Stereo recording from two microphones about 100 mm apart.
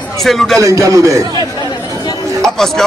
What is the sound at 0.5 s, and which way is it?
Speech, 30° right (ahead or behind).